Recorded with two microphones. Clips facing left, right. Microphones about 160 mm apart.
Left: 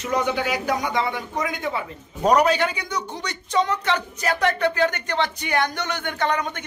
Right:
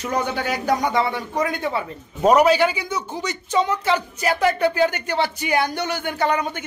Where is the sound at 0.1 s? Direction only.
35° right (ahead or behind).